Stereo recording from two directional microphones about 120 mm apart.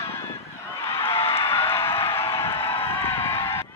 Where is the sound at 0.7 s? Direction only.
25° left (ahead or behind).